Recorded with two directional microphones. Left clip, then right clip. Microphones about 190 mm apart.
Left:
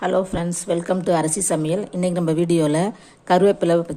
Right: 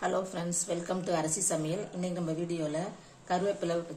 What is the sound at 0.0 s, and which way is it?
A woman's voice, 30° left (ahead or behind).